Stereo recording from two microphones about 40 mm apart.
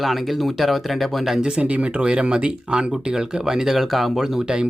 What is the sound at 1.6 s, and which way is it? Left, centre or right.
Speech, right.